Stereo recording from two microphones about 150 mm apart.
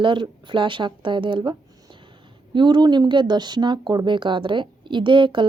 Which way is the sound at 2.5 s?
30° right (ahead or behind).